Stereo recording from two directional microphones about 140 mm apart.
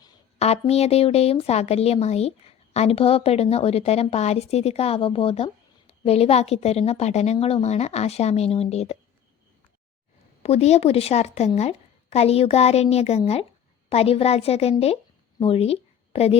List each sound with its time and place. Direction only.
0.3 s a woman's voice: 50° left (ahead or behind)
10.4 s a woman's voice: 50° left (ahead or behind)